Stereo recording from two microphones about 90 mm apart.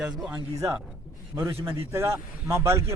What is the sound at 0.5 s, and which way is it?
A man's voice, 35° right (ahead or behind).